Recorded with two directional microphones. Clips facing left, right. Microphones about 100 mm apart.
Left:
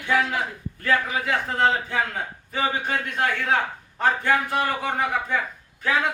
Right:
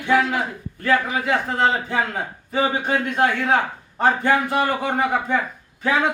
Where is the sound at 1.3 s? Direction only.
25° right (ahead or behind).